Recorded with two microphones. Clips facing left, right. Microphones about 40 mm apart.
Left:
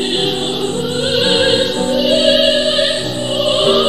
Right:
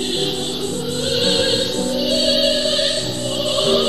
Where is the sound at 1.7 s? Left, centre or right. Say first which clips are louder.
Left 6 dB; left.